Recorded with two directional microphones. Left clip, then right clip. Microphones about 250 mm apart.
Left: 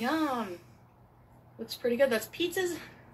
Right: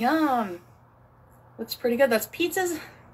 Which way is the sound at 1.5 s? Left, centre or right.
Right.